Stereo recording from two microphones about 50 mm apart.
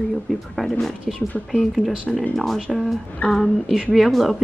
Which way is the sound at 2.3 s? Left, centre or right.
Centre.